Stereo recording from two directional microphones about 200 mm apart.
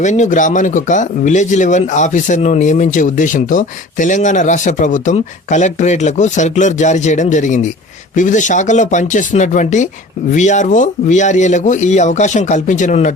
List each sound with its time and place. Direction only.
0.0 s speech: 35° left (ahead or behind)